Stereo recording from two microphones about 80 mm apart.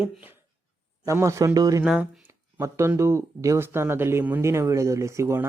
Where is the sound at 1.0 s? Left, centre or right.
Right.